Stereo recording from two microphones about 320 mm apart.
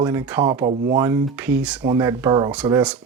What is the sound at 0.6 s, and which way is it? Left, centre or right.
Speech, right.